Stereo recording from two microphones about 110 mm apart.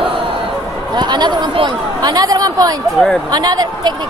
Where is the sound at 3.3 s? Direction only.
35° right (ahead or behind).